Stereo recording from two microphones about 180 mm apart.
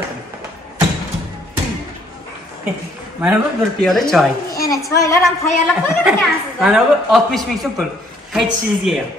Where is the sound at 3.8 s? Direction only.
Centre (ahead or behind).